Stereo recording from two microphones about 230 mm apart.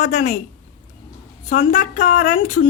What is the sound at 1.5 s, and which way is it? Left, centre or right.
A woman's voice, left.